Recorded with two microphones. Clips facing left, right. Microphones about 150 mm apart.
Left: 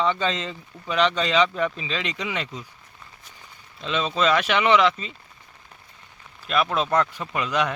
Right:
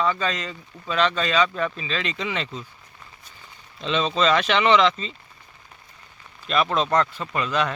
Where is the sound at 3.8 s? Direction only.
5° left (ahead or behind).